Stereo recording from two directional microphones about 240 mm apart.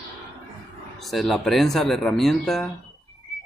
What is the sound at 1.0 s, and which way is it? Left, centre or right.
A man's voice, centre.